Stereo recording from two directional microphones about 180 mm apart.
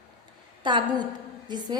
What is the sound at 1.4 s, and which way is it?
Speech, 25° right (ahead or behind).